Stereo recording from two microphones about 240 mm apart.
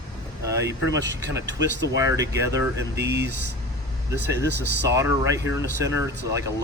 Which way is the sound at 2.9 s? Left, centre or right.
Right.